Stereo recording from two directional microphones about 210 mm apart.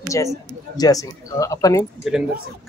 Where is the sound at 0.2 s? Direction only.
15° left (ahead or behind).